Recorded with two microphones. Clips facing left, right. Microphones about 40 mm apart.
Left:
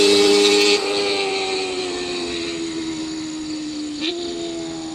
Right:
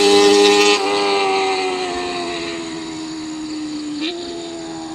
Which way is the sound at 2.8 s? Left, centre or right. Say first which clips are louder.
Left 1 dB; centre.